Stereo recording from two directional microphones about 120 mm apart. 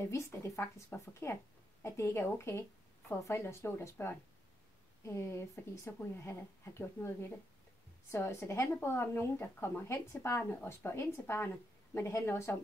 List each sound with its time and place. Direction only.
0.1 s speech: 20° left (ahead or behind)